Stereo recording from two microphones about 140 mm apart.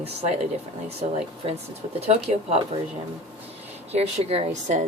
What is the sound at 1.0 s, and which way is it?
Speech, 50° right (ahead or behind).